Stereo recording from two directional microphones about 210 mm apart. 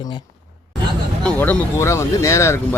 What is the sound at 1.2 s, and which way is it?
Speech, 10° left (ahead or behind).